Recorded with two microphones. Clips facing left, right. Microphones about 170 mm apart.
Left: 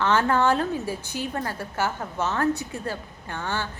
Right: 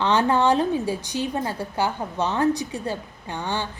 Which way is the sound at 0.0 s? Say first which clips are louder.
Right 2 dB; 15° right (ahead or behind).